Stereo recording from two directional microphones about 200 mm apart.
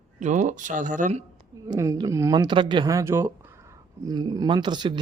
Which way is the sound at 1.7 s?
15° right (ahead or behind).